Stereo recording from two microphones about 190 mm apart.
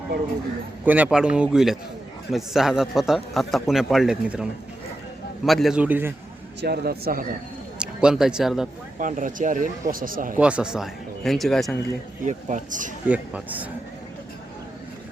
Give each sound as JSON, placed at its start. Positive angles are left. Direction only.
{"t": 0.9, "sound": "speech", "side_deg": -10}
{"t": 5.5, "sound": "speech", "side_deg": 0}
{"t": 6.6, "sound": "speech", "side_deg": -55}
{"t": 7.8, "sound": "a man's voice", "side_deg": -5}
{"t": 9.0, "sound": "speech", "side_deg": -45}
{"t": 10.3, "sound": "speech", "side_deg": -5}
{"t": 12.2, "sound": "speech", "side_deg": -40}
{"t": 13.1, "sound": "speech", "side_deg": -10}